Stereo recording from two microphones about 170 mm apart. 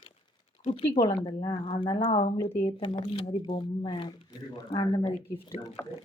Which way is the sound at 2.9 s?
30° left (ahead or behind).